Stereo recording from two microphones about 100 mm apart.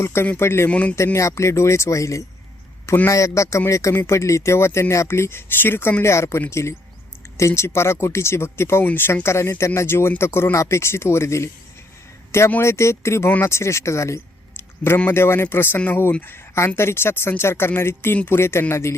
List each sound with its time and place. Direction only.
0.0 s speech: 25° left (ahead or behind)
0.7 s speech: 15° left (ahead or behind)
0.9 s speech: 30° left (ahead or behind)
2.8 s a man's voice: 20° left (ahead or behind)
3.1 s speech: 30° left (ahead or behind)
12.5 s speech: 25° left (ahead or behind)